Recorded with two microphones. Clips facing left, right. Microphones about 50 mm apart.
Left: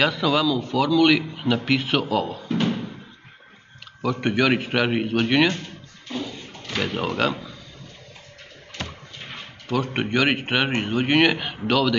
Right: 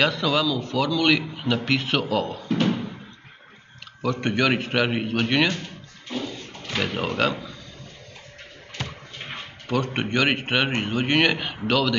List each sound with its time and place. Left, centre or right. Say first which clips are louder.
0.0 s a man's voice: left 1 dB; centre
4.0 s a man's voice: left 1 dB; centre
6.7 s speech: left 1 dB; centre
8.8 s a sound: even; centre
9.7 s a man's voice: left 1 dB; centre